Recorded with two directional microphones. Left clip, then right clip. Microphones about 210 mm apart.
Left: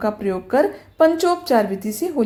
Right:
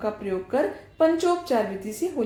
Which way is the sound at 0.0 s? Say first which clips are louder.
Left 6 dB; 40° left (ahead or behind).